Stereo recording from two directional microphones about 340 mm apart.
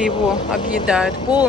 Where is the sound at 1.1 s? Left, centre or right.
Centre.